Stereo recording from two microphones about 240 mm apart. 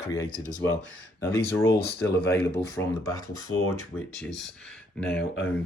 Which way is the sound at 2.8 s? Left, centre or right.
Centre.